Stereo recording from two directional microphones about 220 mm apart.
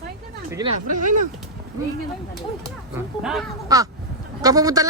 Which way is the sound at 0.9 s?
35° right (ahead or behind).